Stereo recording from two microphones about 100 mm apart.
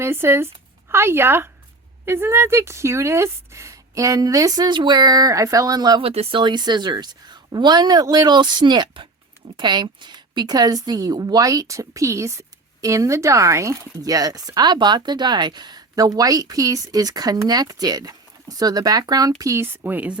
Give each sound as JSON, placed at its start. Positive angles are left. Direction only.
{"t": 0.0, "sound": "speech", "side_deg": -25}
{"t": 6.0, "sound": "speech", "side_deg": -75}
{"t": 6.4, "sound": "speech", "side_deg": -50}
{"t": 19.4, "sound": "a woman's voice", "side_deg": -30}